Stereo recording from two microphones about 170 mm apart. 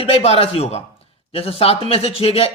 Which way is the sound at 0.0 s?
35° left (ahead or behind).